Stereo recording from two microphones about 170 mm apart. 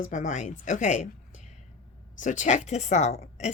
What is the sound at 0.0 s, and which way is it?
Speech, 45° left (ahead or behind).